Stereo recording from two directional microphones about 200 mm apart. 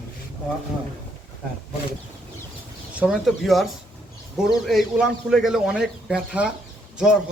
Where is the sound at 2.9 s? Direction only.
5° right (ahead or behind).